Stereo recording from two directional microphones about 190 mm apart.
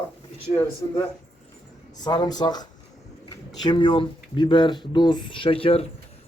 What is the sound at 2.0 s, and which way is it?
Speech, 20° left (ahead or behind).